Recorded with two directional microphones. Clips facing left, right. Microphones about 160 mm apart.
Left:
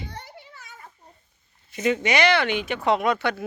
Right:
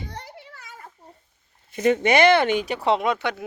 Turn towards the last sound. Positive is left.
turn(degrees=-20)  # may be behind; listen again after turning